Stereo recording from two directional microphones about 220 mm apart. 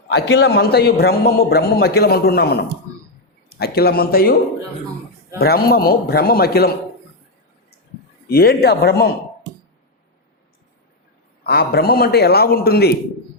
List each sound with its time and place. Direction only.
0.1 s a man's voice: 50° left (ahead or behind)
5.4 s a man's voice: 45° left (ahead or behind)
8.3 s a man's voice: 45° left (ahead or behind)
11.4 s a man's voice: 45° left (ahead or behind)